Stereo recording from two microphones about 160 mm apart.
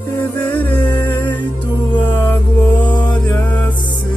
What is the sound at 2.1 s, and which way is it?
Mantra, 10° left (ahead or behind).